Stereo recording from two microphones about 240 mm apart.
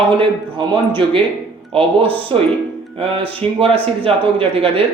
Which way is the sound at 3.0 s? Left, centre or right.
Right.